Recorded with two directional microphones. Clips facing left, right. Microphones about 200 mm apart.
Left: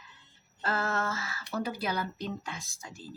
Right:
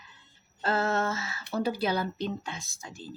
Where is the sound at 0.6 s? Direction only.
25° right (ahead or behind).